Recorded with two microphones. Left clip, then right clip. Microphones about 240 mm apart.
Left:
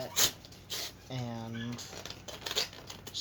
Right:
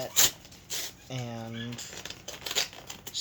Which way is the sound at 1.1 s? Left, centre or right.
Right.